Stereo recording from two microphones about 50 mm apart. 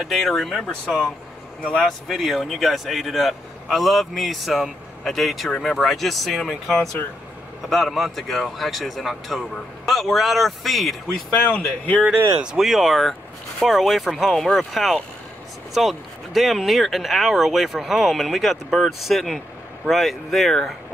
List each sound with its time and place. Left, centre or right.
0.1 s speech: centre
0.7 s speech: centre
2.0 s speech: centre
11.5 s speech: left
12.5 s speech: centre